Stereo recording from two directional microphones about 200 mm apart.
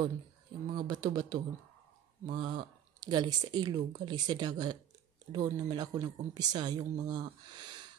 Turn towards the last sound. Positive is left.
turn(degrees=-20)  # may be behind; listen again after turning